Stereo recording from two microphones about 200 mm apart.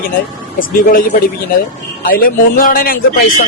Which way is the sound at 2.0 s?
45° left (ahead or behind).